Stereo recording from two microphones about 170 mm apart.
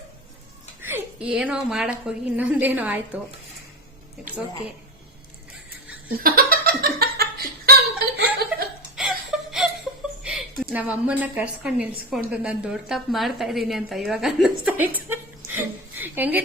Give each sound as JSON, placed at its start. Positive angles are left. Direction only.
{"t": 0.8, "sound": "a woman's voice", "side_deg": -10}
{"t": 6.1, "sound": "laughter", "side_deg": -60}
{"t": 9.0, "sound": "whimper", "side_deg": -5}
{"t": 10.2, "sound": "a woman's voice", "side_deg": -5}